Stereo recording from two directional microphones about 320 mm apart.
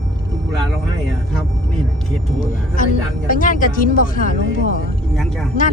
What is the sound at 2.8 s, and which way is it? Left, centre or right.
Speech, left.